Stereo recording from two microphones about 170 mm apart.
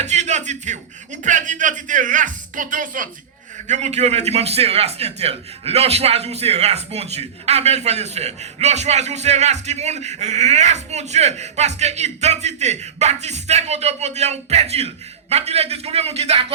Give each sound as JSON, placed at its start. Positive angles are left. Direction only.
{"t": 0.0, "sound": "speech", "side_deg": -40}
{"t": 3.7, "sound": "a man's voice", "side_deg": -40}